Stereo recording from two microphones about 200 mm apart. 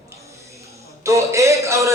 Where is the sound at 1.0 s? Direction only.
15° right (ahead or behind).